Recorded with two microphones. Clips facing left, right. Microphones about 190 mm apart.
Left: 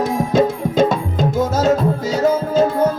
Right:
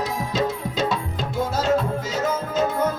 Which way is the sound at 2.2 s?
35° left (ahead or behind).